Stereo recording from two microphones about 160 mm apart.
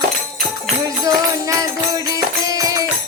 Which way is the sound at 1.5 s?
20° right (ahead or behind).